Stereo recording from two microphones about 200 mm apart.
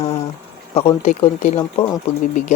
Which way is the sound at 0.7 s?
30° left (ahead or behind).